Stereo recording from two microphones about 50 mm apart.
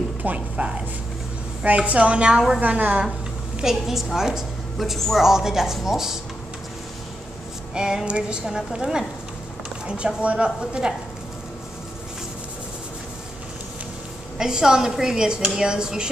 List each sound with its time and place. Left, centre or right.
0.2 s a woman's voice: right
2.6 s a woman's voice: right
3.6 s a woman's voice: centre
5.2 s a woman's voice: centre
7.7 s a woman's voice: centre
14.4 s a woman's voice: centre